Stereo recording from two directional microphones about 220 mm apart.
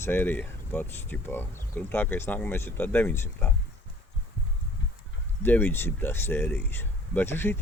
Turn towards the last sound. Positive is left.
turn(degrees=10)  # may be behind; listen again after turning